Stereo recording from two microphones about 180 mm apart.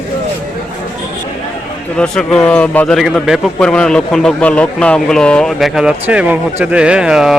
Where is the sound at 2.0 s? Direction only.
5° left (ahead or behind).